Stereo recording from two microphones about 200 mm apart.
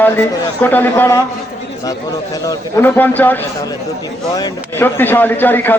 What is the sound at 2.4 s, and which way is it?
A man's voice, 10° left (ahead or behind).